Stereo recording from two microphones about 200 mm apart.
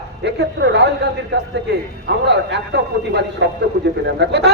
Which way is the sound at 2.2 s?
60° right (ahead or behind).